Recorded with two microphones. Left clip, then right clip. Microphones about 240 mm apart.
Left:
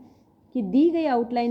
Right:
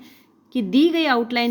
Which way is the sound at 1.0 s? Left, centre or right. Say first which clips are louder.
Right 4 dB; right.